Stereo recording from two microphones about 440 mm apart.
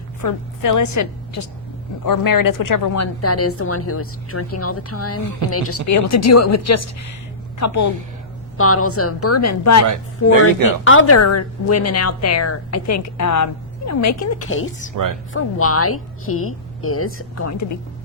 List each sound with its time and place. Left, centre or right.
0.2 s a woman's voice: left